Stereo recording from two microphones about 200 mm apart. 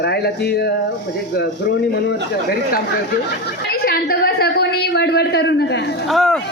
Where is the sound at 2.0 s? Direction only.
50° left (ahead or behind).